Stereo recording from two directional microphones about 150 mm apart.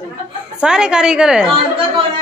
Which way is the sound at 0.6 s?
5° right (ahead or behind).